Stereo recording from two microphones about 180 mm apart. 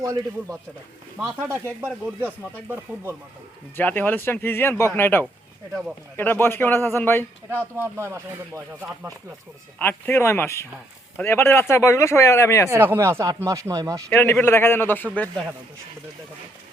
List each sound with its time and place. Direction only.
0.0 s speech: 20° right (ahead or behind)
1.2 s speech: centre (ahead or behind)
2.2 s speech: 10° right (ahead or behind)
3.8 s a man's voice: 10° left (ahead or behind)
7.6 s speech: 15° right (ahead or behind)
9.7 s a man's voice: 10° left (ahead or behind)
12.7 s speech: 15° right (ahead or behind)
14.1 s a man's voice: 10° left (ahead or behind)